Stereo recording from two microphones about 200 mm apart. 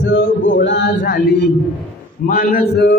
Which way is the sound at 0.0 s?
65° left (ahead or behind).